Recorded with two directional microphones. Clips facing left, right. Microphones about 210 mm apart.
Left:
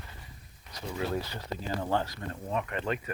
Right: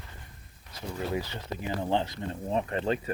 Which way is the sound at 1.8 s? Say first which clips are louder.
Right 3 dB; 20° right (ahead or behind).